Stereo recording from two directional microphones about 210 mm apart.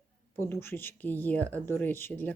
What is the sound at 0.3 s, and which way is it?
Speech, 10° left (ahead or behind).